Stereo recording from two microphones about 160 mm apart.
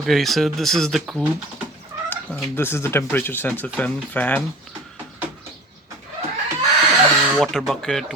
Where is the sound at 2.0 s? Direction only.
15° left (ahead or behind).